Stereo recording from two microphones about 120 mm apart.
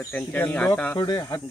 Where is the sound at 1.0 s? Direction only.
30° left (ahead or behind).